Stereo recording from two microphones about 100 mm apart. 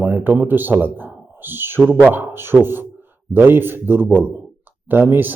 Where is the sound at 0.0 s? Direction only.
20° right (ahead or behind).